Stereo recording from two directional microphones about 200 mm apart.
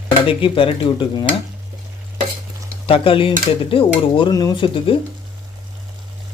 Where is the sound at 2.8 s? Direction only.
25° left (ahead or behind).